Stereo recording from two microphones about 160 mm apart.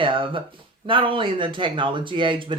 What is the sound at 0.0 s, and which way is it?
Speech, 30° right (ahead or behind).